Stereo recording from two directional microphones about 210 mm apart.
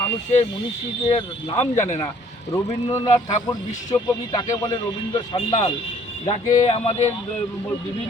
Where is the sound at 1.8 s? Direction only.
30° left (ahead or behind).